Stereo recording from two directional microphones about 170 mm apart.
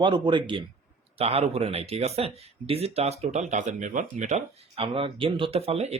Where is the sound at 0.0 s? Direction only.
30° right (ahead or behind).